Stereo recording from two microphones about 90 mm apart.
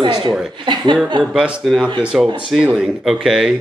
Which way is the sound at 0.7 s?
65° right (ahead or behind).